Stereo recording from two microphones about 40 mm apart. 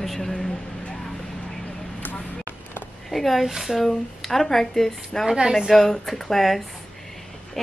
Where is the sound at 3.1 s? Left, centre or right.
Centre.